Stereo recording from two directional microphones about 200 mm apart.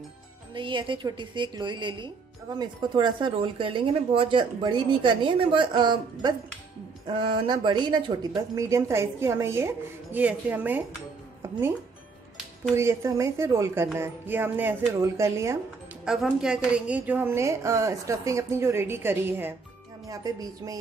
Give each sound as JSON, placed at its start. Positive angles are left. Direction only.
{"t": 0.6, "sound": "a woman's voice", "side_deg": -25}
{"t": 11.4, "sound": "music", "side_deg": -10}
{"t": 12.7, "sound": "a woman's voice", "side_deg": -15}
{"t": 16.1, "sound": "a woman's voice", "side_deg": -5}